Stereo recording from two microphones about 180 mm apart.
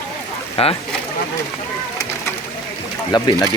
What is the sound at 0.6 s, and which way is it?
Speech, 30° left (ahead or behind).